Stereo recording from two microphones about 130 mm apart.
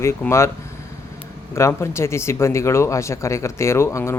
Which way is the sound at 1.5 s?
20° left (ahead or behind).